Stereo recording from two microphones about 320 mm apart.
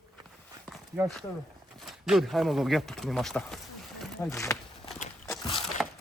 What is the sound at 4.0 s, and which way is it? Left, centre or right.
Walk, centre.